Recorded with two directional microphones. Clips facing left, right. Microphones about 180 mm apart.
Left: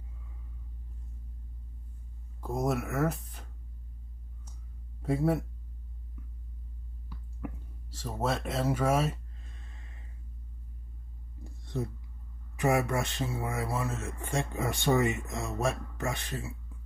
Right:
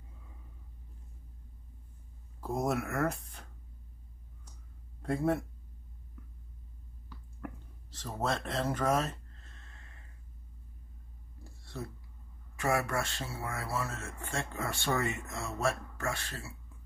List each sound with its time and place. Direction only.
2.4 s speech: centre (ahead or behind)
5.0 s speech: 5° left (ahead or behind)
6.2 s a sound: 5° left (ahead or behind)
11.4 s whispering: 20° left (ahead or behind)
12.5 s speech: 20° left (ahead or behind)